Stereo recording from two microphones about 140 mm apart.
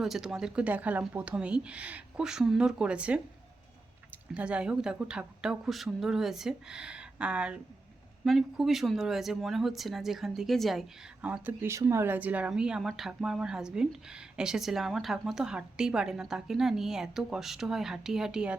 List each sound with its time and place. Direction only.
0.0 s a woman's voice: centre (ahead or behind)
4.4 s speech: 5° right (ahead or behind)